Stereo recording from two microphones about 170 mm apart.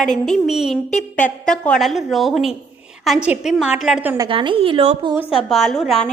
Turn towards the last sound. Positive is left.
turn(degrees=0)  # may be behind; listen again after turning